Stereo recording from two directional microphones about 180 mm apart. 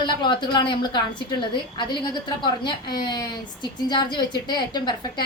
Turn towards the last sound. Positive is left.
turn(degrees=25)  # may be behind; listen again after turning